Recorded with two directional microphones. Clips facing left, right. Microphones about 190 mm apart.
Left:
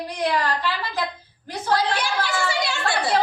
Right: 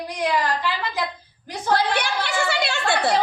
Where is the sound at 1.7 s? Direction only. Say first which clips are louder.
Right 1 dB; 65° right (ahead or behind).